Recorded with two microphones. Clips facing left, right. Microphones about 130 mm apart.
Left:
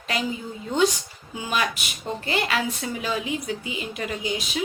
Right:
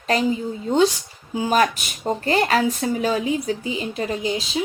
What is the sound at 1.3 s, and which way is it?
Speech, 35° right (ahead or behind).